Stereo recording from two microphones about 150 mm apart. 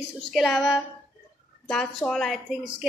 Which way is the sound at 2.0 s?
5° left (ahead or behind).